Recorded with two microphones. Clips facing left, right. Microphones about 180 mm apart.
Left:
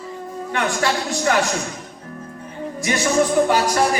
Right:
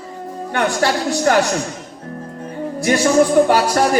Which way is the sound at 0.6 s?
40° right (ahead or behind).